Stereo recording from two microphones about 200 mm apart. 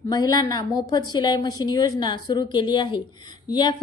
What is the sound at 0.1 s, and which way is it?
A woman's voice, 20° left (ahead or behind).